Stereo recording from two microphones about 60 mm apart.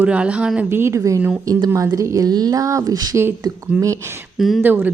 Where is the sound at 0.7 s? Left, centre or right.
Right.